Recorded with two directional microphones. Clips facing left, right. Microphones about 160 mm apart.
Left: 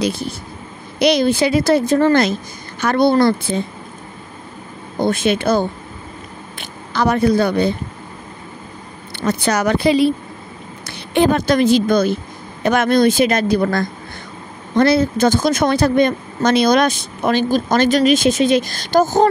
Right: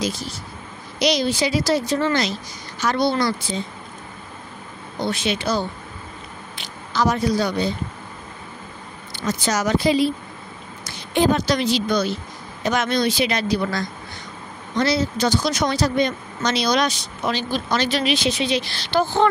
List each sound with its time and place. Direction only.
0.0 s speech: 60° left (ahead or behind)
4.9 s a woman's voice: 50° left (ahead or behind)
9.1 s speech: 60° left (ahead or behind); by 19.2 s 45° left (ahead or behind)